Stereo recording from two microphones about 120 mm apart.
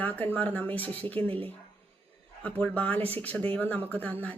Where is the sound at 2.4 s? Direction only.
15° left (ahead or behind).